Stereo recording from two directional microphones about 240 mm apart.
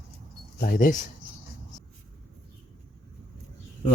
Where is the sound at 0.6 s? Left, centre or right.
Left.